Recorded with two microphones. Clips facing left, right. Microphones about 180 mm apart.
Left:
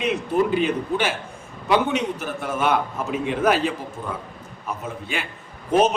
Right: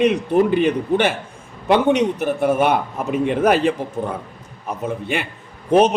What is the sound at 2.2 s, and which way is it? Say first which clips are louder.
A man's voice: right 7 dB; 55° right (ahead or behind).